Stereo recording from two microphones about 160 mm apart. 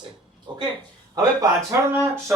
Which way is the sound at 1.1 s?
20° right (ahead or behind).